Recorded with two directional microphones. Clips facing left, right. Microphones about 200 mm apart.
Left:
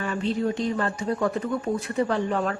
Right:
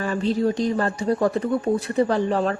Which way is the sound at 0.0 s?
40° right (ahead or behind).